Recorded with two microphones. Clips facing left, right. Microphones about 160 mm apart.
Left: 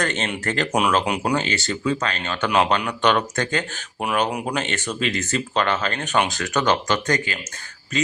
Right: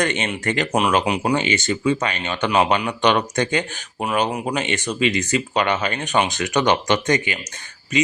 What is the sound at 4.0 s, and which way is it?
Speech, centre (ahead or behind).